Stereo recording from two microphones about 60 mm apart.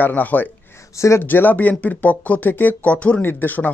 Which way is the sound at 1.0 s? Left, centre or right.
Left.